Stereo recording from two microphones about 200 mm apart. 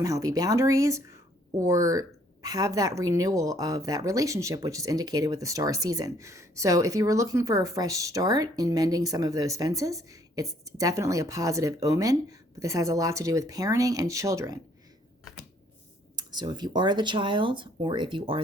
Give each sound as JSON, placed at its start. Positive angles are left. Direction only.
{"t": 0.0, "sound": "a woman's voice", "side_deg": -15}
{"t": 16.1, "sound": "speech", "side_deg": -20}